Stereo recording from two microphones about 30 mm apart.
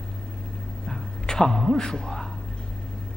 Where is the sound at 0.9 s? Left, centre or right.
Centre.